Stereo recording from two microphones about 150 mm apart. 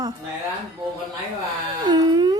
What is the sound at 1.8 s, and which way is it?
Speech, 30° right (ahead or behind).